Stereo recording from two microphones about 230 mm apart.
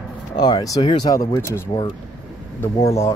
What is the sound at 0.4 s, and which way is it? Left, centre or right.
Speech, centre.